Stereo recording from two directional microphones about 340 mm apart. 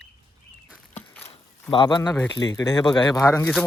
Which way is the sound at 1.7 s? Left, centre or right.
Centre.